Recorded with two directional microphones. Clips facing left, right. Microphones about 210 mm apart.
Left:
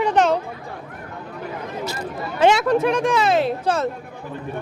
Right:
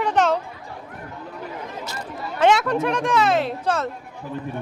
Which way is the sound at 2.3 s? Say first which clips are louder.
Left 2 dB; 5° left (ahead or behind).